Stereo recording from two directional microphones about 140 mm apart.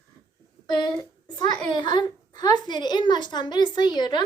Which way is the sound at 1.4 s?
30° left (ahead or behind).